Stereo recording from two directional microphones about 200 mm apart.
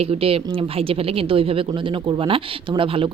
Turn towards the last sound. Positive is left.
turn(degrees=-25)  # may be behind; listen again after turning